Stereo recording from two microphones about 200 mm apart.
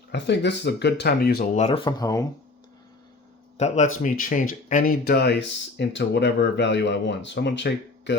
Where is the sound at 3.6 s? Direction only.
35° left (ahead or behind).